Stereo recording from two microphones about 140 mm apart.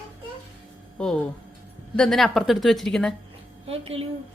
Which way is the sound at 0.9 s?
5° left (ahead or behind).